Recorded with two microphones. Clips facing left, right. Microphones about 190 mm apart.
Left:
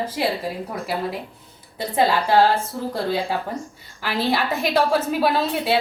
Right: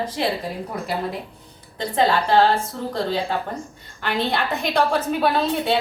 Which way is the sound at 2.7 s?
10° left (ahead or behind).